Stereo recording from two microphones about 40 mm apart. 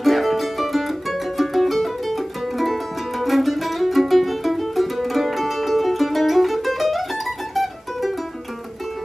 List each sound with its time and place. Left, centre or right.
0.0 s music: centre